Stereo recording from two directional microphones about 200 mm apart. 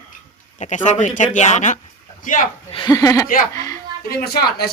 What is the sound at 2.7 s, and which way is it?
Speech, 20° left (ahead or behind).